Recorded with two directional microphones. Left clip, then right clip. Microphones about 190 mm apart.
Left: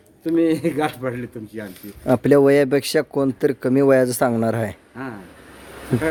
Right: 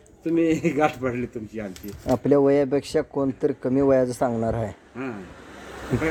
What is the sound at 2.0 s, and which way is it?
Speech, 45° left (ahead or behind).